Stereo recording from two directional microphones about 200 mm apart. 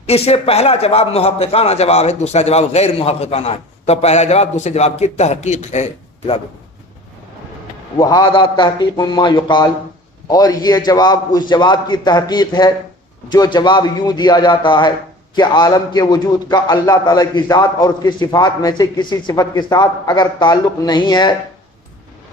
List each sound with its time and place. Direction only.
0.0 s a man's voice: 30° left (ahead or behind)
7.9 s a man's voice: 20° left (ahead or behind)